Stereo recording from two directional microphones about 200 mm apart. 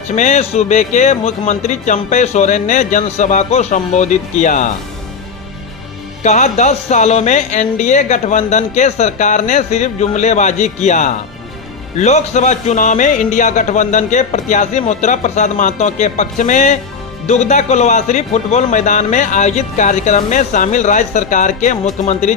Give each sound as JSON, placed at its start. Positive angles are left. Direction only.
{"t": 0.2, "sound": "speech", "side_deg": 35}
{"t": 6.2, "sound": "speech", "side_deg": 35}